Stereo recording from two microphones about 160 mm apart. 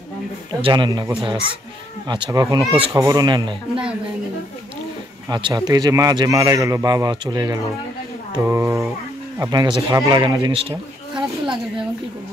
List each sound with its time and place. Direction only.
0.6 s speech: 30° right (ahead or behind)
5.3 s speech: 25° right (ahead or behind)